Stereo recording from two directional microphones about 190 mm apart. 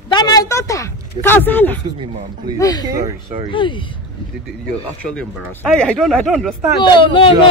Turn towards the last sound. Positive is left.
turn(degrees=25)  # may be behind; listen again after turning